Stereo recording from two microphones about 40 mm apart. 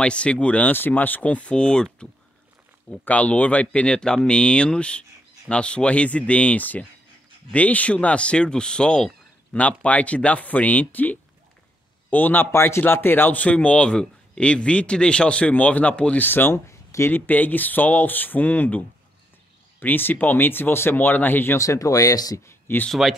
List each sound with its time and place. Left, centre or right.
0.0 s speech: left
0.6 s speech: left
2.9 s speech: left
9.6 s speech: left
12.4 s speech: left
12.8 s speech: left
13.3 s speech: left
15.5 s speech: left
16.2 s speech: left
17.1 s speech: left
19.8 s speech: left
22.7 s speech: left